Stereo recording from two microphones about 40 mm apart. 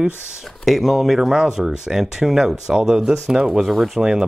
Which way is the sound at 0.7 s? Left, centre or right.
Centre.